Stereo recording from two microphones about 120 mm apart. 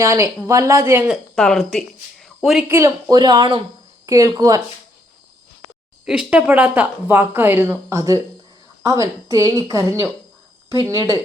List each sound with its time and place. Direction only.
0.0 s speech: 25° right (ahead or behind)
1.4 s speech: 5° left (ahead or behind)
2.2 s a sound: 5° right (ahead or behind)
2.6 s speech: 20° right (ahead or behind)
3.1 s speech: 35° right (ahead or behind)
6.1 s speech: 10° right (ahead or behind); by 11.2 s 30° right (ahead or behind)